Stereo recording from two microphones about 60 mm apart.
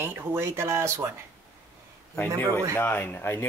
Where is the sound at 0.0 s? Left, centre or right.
Right.